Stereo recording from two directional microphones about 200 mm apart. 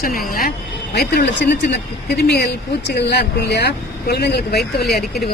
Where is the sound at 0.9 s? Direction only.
55° left (ahead or behind).